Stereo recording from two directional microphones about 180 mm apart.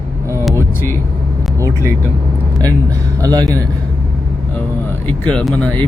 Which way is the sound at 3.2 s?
20° right (ahead or behind).